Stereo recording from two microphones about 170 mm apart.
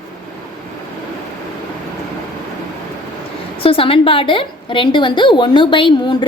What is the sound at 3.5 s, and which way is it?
A woman's voice, 30° left (ahead or behind).